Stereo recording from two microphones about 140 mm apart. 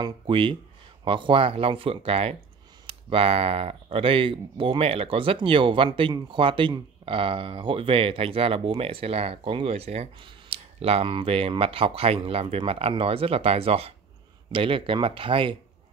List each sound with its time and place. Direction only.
0.0 s speech: 40° right (ahead or behind)